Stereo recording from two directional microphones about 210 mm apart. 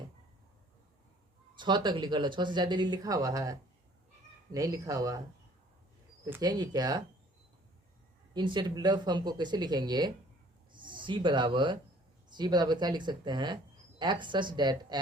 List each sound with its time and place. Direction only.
1.5 s speech: 20° right (ahead or behind)
6.2 s speech: 15° right (ahead or behind)
8.3 s speech: 20° right (ahead or behind)